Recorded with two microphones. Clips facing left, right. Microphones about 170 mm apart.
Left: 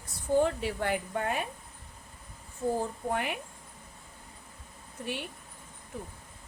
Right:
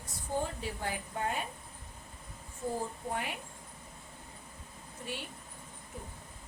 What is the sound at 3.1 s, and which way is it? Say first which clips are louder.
Speech: left 4 dB; 65° left (ahead or behind).